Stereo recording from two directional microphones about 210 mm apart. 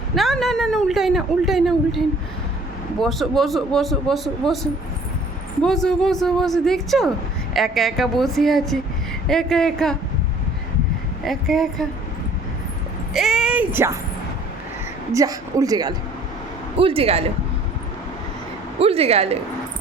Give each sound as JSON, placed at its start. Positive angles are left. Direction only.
{"t": 0.2, "sound": "a woman's voice", "side_deg": 0}
{"t": 3.0, "sound": "a woman's voice", "side_deg": 0}
{"t": 11.2, "sound": "a woman's voice", "side_deg": 0}
{"t": 13.1, "sound": "speech", "side_deg": 0}
{"t": 15.1, "sound": "speech", "side_deg": -15}
{"t": 18.8, "sound": "speech", "side_deg": -30}